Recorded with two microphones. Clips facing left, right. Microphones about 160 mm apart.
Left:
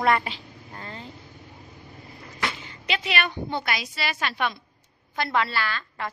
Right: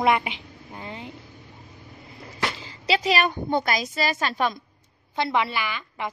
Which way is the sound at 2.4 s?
30° right (ahead or behind).